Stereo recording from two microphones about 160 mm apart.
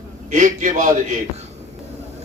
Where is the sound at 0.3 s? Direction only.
50° right (ahead or behind).